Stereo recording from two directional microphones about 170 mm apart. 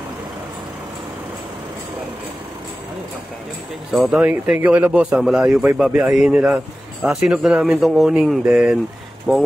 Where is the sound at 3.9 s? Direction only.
5° right (ahead or behind).